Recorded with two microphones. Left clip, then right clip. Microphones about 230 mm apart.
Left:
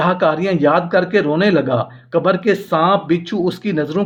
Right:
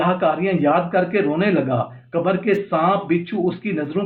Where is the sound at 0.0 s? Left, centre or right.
Left.